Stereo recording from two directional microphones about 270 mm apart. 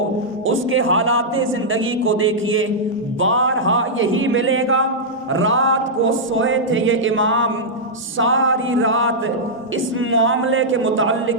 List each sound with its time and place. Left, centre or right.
0.4 s speech: right